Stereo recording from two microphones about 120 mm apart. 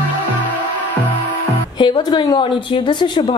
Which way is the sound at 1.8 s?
40° left (ahead or behind).